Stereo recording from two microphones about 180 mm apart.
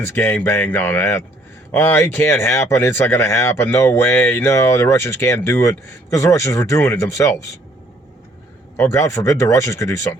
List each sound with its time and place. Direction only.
0.0 s speech: 10° left (ahead or behind)
8.7 s speech: 15° left (ahead or behind)